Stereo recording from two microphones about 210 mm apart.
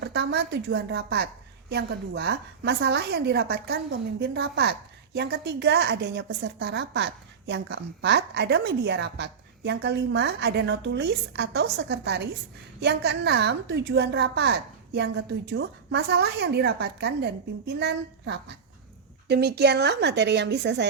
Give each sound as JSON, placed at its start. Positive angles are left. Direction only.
{"t": 0.0, "sound": "a woman's voice", "side_deg": -55}